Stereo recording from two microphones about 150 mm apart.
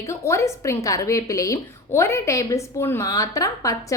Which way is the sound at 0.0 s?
20° left (ahead or behind).